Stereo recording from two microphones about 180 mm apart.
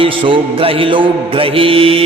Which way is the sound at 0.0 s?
30° right (ahead or behind).